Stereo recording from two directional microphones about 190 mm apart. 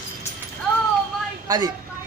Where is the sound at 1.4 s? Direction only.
20° right (ahead or behind).